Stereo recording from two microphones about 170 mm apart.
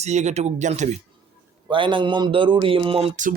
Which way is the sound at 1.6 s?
30° right (ahead or behind).